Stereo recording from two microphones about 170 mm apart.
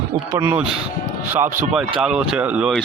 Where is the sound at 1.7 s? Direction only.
5° right (ahead or behind).